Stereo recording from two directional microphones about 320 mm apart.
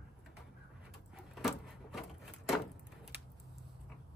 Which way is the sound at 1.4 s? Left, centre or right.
Centre.